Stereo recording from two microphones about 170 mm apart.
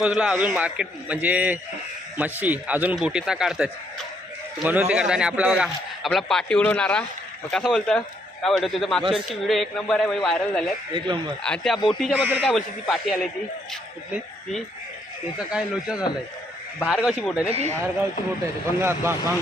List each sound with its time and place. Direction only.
0.0 s a man's voice: 5° right (ahead or behind)
10.9 s speech: 30° right (ahead or behind)
11.4 s a man's voice: 5° left (ahead or behind)
12.1 s speech: 10° right (ahead or behind)
12.9 s a man's voice: 5° left (ahead or behind)
15.5 s a man's voice: 5° right (ahead or behind)
17.5 s speech: 40° right (ahead or behind)
18.8 s speech: 15° right (ahead or behind)